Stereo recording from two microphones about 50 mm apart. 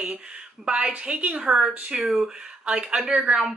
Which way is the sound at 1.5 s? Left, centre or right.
Centre.